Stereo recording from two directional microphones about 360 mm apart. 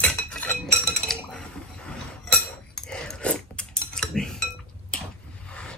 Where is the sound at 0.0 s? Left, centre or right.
Centre.